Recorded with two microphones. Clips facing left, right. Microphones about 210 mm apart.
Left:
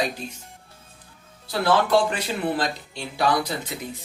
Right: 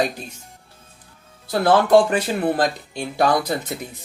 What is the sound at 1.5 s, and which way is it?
Speech, 50° right (ahead or behind).